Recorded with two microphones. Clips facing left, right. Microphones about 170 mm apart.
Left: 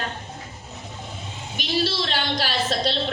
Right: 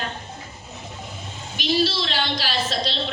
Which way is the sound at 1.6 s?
55° left (ahead or behind).